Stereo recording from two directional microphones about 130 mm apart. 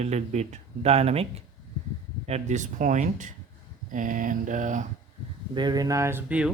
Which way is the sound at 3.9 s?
90° right.